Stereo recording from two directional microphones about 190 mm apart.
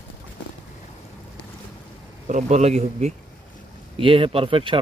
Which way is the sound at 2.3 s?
35° right (ahead or behind).